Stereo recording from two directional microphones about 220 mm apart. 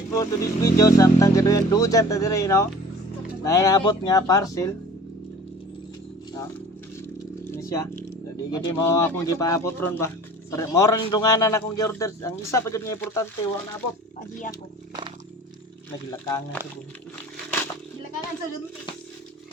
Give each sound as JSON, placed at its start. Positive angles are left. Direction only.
{"t": 0.1, "sound": "speech", "side_deg": 15}
{"t": 7.5, "sound": "a sound", "side_deg": 15}
{"t": 8.4, "sound": "speech", "side_deg": 20}
{"t": 16.0, "sound": "speech", "side_deg": 15}